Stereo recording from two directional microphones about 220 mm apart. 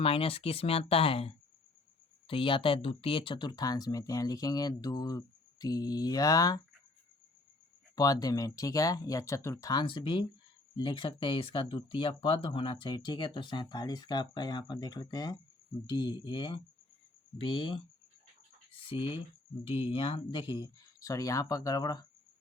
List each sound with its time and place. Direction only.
0.0 s speech: 25° left (ahead or behind)
7.9 s speech: 15° left (ahead or behind)